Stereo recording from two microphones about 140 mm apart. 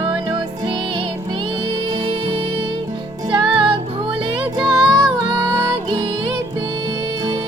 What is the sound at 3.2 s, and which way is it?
Music, 35° right (ahead or behind).